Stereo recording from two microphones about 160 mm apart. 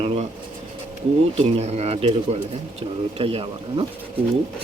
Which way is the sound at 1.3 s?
40° right (ahead or behind).